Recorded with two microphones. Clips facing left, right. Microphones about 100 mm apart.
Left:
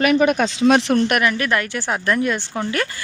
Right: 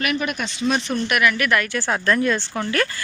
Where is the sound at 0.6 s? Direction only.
85° left.